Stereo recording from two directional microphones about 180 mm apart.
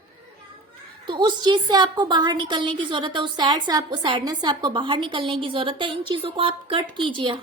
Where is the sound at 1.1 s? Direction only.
25° right (ahead or behind).